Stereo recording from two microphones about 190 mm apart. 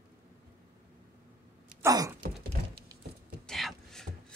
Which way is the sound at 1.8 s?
15° right (ahead or behind).